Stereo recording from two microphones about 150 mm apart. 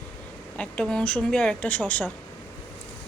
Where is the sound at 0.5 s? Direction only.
5° left (ahead or behind).